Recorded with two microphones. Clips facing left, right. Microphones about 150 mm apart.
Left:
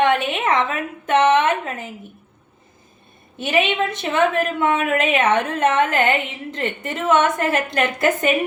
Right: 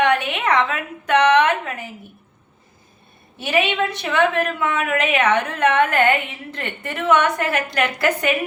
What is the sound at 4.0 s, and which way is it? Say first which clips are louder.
A woman's voice: even; 25° left (ahead or behind).